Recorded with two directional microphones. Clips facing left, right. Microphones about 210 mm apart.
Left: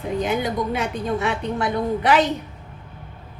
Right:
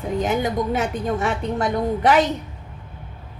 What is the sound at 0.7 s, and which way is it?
A woman's voice, 45° right (ahead or behind).